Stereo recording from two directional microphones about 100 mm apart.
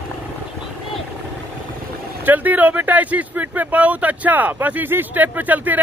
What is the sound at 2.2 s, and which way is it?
Speech, 15° right (ahead or behind).